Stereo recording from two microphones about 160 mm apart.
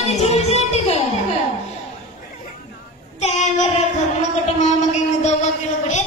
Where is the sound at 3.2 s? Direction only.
45° left (ahead or behind).